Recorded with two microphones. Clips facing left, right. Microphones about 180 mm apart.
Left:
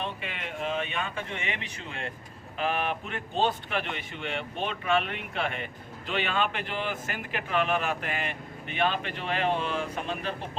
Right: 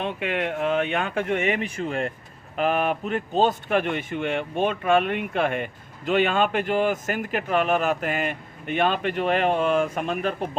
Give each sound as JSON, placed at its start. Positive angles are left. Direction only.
{"t": 0.0, "sound": "speech", "side_deg": -65}